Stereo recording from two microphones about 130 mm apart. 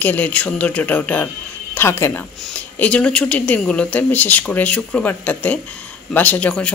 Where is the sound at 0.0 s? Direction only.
15° left (ahead or behind).